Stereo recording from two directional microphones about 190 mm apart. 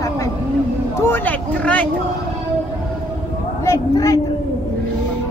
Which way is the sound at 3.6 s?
15° left (ahead or behind).